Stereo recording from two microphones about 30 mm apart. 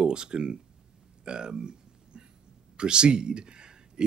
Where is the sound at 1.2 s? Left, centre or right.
Right.